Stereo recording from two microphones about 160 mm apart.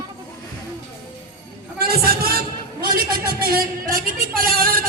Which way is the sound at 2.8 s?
70° right (ahead or behind).